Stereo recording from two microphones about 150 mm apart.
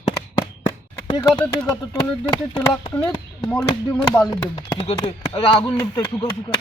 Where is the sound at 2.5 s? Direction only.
30° left (ahead or behind).